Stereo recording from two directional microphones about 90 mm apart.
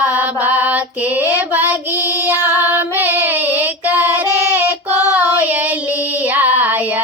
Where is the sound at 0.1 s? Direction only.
20° right (ahead or behind).